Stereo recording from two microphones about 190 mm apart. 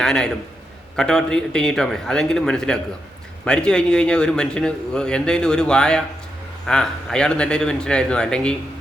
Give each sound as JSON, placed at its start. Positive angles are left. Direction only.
{"t": 0.0, "sound": "a man's voice", "side_deg": 5}